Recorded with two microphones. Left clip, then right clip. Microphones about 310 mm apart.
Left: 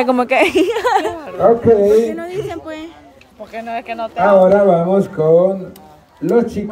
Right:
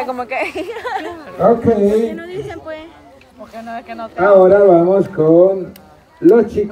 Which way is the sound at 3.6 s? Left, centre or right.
Left.